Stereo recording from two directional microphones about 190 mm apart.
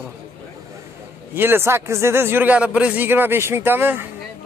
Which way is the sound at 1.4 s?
10° right (ahead or behind).